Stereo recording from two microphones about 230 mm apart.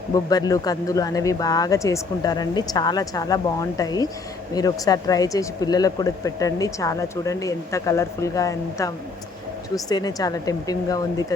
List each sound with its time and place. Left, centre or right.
0.1 s speech: centre